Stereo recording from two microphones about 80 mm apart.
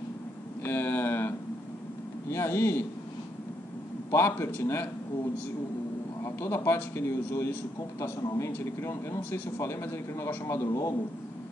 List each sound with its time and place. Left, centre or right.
0.7 s speech: left
4.1 s speech: left
6.2 s speech: left